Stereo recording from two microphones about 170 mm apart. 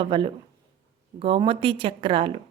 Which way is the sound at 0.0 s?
30° right (ahead or behind).